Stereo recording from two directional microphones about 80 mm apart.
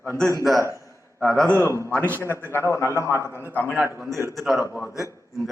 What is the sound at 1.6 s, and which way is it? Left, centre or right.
A man's voice, left.